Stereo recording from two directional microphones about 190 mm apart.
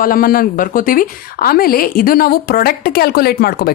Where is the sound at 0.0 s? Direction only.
50° left (ahead or behind).